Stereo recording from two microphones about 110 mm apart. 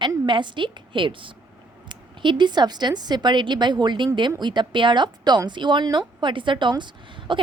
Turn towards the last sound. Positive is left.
turn(degrees=-45)  # may be behind; listen again after turning